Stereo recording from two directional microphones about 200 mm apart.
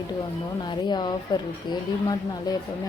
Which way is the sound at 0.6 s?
20° left (ahead or behind).